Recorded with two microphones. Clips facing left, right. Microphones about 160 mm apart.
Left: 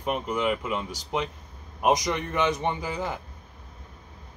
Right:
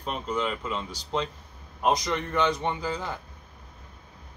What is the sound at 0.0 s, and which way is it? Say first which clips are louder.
Speech: left 3 dB; 10° left (ahead or behind).